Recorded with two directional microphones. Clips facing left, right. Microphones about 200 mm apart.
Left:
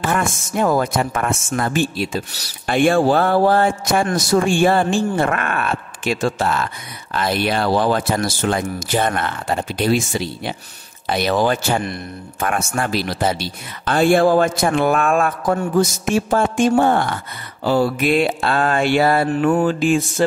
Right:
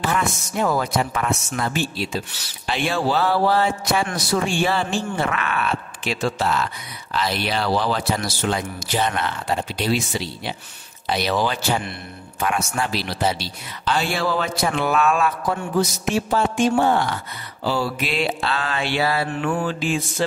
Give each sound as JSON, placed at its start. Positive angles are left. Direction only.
{"t": 0.0, "sound": "a woman's voice", "side_deg": 50}